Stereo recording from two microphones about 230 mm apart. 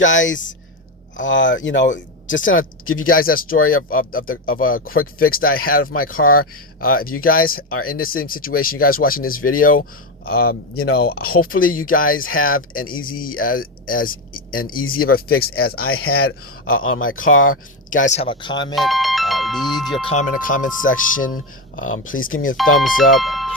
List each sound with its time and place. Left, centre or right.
0.0 s speech: left
3.0 s speech: left
12.1 s speech: left
12.4 s speech: left
14.8 s speech: left
15.4 s speech: left
15.9 s speech: left
17.9 s speech: left
18.7 s speech: centre
20.1 s speech: left
22.1 s speech: left
22.5 s speech: centre